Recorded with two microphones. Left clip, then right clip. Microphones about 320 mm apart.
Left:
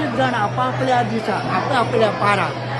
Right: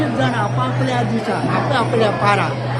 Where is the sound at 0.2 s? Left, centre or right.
Centre.